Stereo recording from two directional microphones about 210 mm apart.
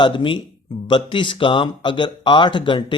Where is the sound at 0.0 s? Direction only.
25° left (ahead or behind).